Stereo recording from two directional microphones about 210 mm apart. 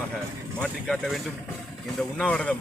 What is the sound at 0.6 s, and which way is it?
A man's voice, 5° left (ahead or behind).